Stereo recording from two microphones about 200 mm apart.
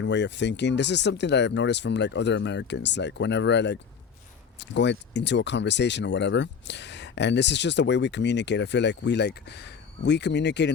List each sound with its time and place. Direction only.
0.0 s speech: 60° left (ahead or behind)